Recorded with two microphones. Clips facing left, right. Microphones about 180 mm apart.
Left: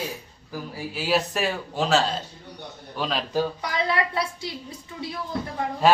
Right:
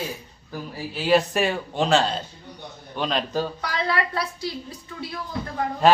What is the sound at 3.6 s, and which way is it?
Speech, 20° left (ahead or behind).